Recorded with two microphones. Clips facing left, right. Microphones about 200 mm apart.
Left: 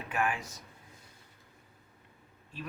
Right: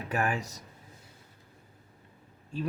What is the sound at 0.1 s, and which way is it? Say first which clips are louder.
Speech: right 2 dB; 40° right (ahead or behind).